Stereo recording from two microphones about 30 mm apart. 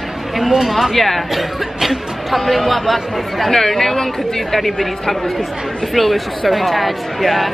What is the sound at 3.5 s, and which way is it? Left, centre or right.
A woman's voice, centre.